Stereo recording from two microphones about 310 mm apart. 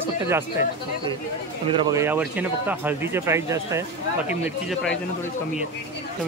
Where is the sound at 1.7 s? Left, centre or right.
Centre.